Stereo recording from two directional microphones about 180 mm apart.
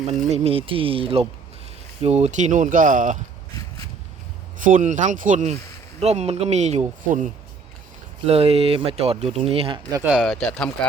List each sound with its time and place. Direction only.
0.3 s speech: 35° right (ahead or behind)
4.6 s speech: 45° right (ahead or behind)
8.3 s speech: 35° right (ahead or behind)
10.0 s speech: centre (ahead or behind)